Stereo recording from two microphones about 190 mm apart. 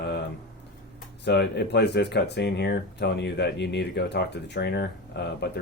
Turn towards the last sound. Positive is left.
turn(degrees=60)  # may be behind; listen again after turning